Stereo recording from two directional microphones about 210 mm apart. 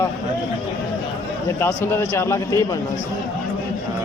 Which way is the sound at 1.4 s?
10° left (ahead or behind).